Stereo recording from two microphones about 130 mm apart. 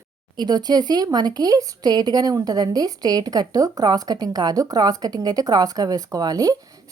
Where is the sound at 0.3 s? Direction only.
30° right (ahead or behind).